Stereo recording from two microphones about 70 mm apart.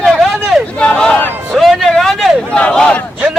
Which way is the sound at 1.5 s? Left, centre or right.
Centre.